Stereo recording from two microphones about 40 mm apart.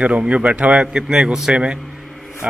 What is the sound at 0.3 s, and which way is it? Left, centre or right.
Speech, right.